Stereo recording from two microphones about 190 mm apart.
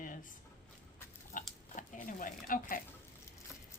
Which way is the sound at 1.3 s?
45° left (ahead or behind).